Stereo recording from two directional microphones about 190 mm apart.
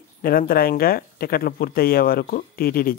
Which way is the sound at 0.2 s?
50° left (ahead or behind).